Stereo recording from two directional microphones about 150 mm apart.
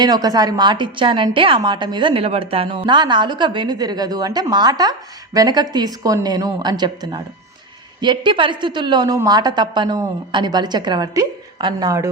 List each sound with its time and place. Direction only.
0.0 s a woman's voice: 25° right (ahead or behind)